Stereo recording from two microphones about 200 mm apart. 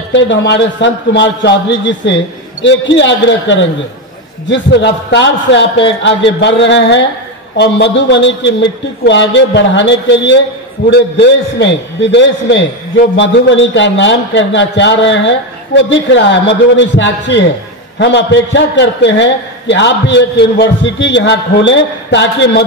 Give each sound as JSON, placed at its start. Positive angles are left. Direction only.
{"t": 0.1, "sound": "a man's voice", "side_deg": 60}